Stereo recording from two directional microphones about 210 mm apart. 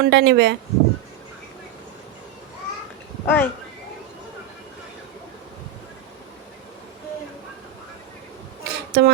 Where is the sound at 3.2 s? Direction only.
10° left (ahead or behind).